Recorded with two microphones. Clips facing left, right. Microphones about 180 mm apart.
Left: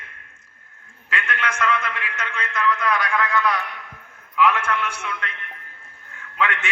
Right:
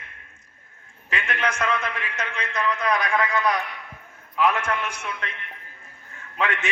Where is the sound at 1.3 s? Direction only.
35° right (ahead or behind).